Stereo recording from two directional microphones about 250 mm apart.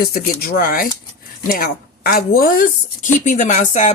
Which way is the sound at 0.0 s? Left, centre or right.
Left.